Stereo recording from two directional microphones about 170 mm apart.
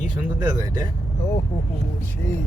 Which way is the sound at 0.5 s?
25° right (ahead or behind).